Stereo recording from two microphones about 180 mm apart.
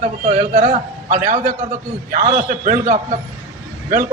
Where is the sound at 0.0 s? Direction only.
40° right (ahead or behind).